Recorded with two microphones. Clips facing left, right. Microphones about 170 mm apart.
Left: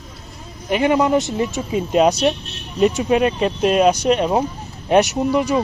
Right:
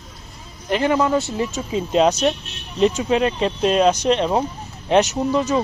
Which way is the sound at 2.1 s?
35° left (ahead or behind).